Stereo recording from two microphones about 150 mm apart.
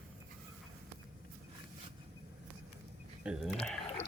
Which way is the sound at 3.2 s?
5° right (ahead or behind).